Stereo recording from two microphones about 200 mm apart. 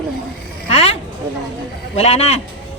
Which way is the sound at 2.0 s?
35° left (ahead or behind).